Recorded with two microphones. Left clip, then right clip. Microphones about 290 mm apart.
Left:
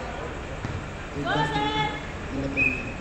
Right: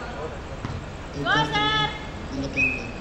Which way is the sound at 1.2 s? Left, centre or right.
Right.